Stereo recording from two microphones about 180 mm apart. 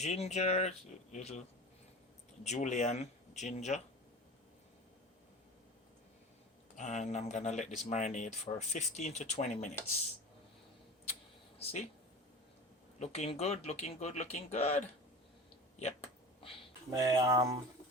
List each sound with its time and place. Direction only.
0.0 s speech: 40° left (ahead or behind)
2.4 s speech: 40° left (ahead or behind)
6.7 s speech: 40° left (ahead or behind)
11.6 s speech: 35° left (ahead or behind)
13.0 s speech: 35° left (ahead or behind)
16.9 s speech: 20° right (ahead or behind)